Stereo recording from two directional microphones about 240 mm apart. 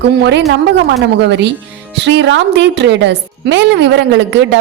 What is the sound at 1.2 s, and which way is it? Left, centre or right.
A woman's voice, right.